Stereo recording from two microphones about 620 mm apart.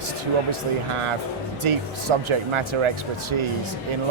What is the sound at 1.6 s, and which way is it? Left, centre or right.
Speech, right.